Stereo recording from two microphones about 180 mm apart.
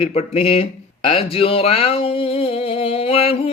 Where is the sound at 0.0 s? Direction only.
35° left (ahead or behind).